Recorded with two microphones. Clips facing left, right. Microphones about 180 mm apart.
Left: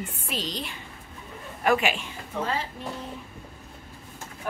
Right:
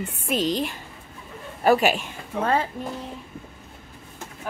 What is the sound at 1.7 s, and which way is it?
A woman's voice, 40° right (ahead or behind).